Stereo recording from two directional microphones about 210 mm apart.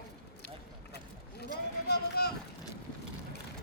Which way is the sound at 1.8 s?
50° left (ahead or behind).